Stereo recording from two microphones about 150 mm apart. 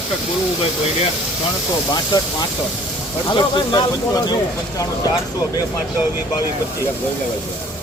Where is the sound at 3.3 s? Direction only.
30° left (ahead or behind).